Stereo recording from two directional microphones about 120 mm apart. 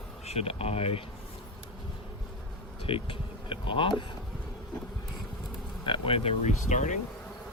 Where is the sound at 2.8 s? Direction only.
50° left (ahead or behind).